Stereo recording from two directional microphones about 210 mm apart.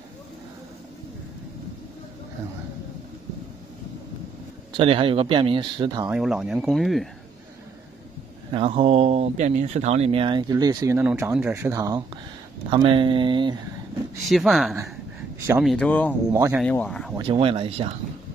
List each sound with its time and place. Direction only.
4.7 s speech: 25° right (ahead or behind)
6.0 s speech: 5° right (ahead or behind)
8.5 s speech: 25° right (ahead or behind)
14.3 s speech: centre (ahead or behind)
16.3 s speech: 15° right (ahead or behind)
16.6 s speech: 5° left (ahead or behind)
17.3 s speech: 25° right (ahead or behind)